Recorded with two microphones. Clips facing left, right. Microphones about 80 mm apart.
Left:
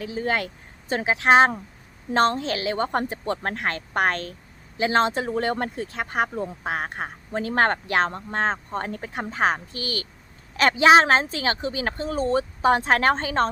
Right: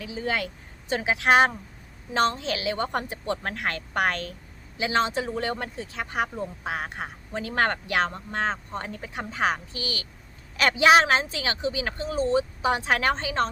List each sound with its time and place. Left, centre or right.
0.0 s speech: left